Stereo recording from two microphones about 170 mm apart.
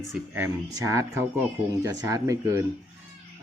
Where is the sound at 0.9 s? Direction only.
15° right (ahead or behind).